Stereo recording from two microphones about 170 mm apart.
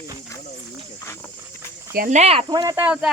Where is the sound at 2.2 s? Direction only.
35° right (ahead or behind).